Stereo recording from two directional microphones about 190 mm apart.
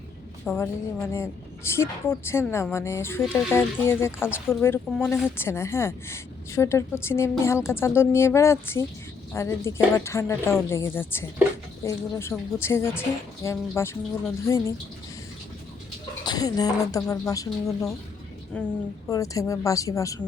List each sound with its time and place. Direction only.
0.4 s a woman's voice: 10° left (ahead or behind)
16.2 s a woman's voice: 20° left (ahead or behind)
19.0 s a woman's voice: 15° left (ahead or behind)